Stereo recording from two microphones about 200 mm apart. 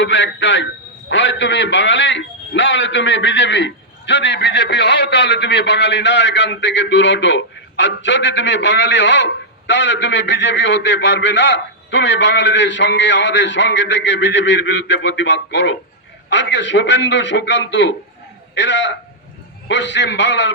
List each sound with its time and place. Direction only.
0.0 s a man's voice: 65° left (ahead or behind)